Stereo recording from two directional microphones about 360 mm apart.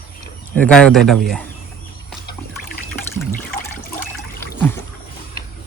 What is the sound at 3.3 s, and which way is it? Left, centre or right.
Water, left.